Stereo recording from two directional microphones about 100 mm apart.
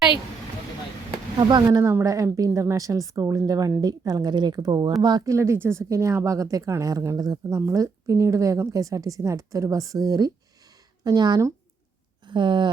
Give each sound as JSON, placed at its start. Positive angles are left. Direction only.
{"t": 1.4, "sound": "speech", "side_deg": -45}
{"t": 1.7, "sound": "a woman's voice", "side_deg": -30}
{"t": 5.3, "sound": "a woman's voice", "side_deg": -25}